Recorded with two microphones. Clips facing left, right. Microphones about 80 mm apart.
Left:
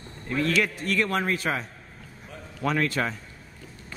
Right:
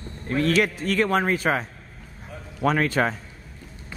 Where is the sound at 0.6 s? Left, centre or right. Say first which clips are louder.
Right 3 dB; right.